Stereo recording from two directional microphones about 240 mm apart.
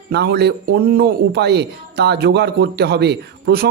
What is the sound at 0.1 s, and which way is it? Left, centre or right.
Speech, right.